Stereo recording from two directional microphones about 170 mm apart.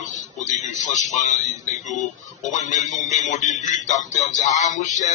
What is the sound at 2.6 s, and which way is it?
Music, 45° left (ahead or behind).